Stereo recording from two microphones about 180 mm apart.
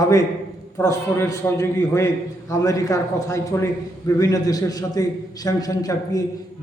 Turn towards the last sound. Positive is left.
turn(degrees=20)  # may be behind; listen again after turning